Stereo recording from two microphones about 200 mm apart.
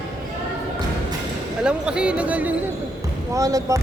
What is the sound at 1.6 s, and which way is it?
Speech, 5° right (ahead or behind).